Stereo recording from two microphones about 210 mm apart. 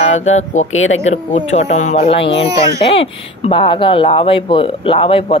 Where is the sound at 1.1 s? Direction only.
35° left (ahead or behind).